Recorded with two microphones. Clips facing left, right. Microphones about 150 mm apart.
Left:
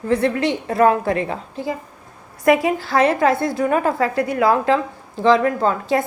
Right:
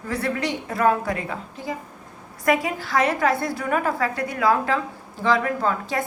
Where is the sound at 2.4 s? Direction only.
25° left (ahead or behind).